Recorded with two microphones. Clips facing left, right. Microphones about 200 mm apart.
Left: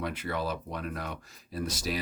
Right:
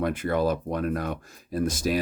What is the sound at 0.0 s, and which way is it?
Speech, 50° right (ahead or behind).